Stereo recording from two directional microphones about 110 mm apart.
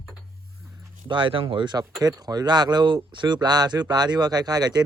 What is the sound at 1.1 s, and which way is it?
Speech, 50° right (ahead or behind).